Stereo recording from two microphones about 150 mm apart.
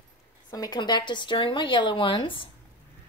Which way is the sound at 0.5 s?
25° left (ahead or behind).